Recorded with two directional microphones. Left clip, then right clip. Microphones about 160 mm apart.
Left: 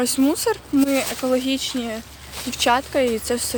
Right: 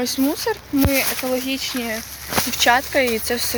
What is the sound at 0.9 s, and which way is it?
Speech, 40° left (ahead or behind).